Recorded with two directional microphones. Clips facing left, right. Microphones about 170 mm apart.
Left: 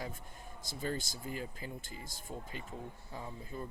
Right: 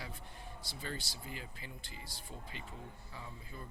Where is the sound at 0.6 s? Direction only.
45° left (ahead or behind).